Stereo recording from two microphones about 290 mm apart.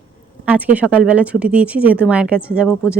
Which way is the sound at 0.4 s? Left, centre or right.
Centre.